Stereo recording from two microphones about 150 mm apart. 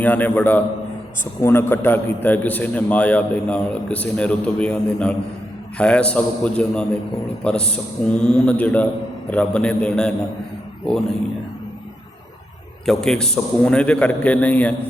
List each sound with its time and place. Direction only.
0.0 s a man's voice: 10° left (ahead or behind)
12.8 s a man's voice: 5° left (ahead or behind)